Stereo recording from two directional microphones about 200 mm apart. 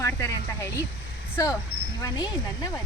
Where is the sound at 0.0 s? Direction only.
15° left (ahead or behind).